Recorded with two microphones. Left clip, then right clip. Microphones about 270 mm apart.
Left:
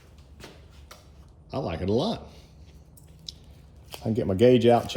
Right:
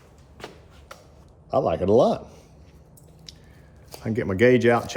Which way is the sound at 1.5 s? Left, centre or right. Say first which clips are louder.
Right 9 dB; centre.